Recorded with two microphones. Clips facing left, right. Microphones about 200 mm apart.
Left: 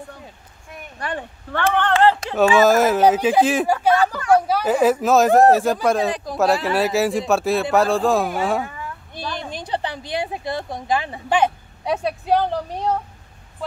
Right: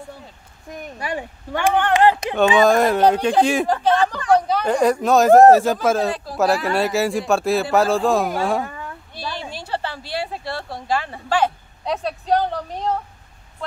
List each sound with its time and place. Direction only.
0.9 s speech: 10° right (ahead or behind)
2.5 s speech: 5° left (ahead or behind)
6.0 s speech: 15° left (ahead or behind)
6.3 s speech: centre (ahead or behind)
8.6 s a sound: 40° right (ahead or behind)
9.2 s a sound: 10° right (ahead or behind)
9.5 s speech: 15° left (ahead or behind)